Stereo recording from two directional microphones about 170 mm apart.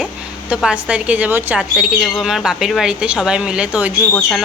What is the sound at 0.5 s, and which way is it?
Speech, 5° right (ahead or behind).